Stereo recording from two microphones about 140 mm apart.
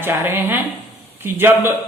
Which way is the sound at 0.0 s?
15° right (ahead or behind).